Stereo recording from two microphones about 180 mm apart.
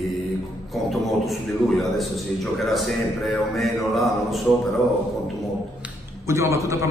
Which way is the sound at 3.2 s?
Centre (ahead or behind).